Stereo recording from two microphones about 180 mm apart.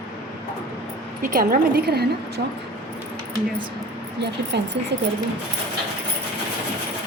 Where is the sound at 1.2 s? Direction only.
50° right (ahead or behind).